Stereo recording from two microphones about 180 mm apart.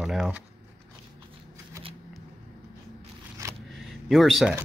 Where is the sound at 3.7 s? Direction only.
Centre (ahead or behind).